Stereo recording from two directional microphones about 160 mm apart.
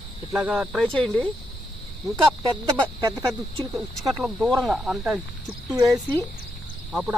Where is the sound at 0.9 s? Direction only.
5° left (ahead or behind).